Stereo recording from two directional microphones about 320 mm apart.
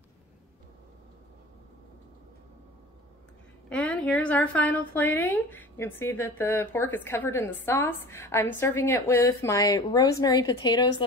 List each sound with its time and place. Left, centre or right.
3.6 s a woman's voice: centre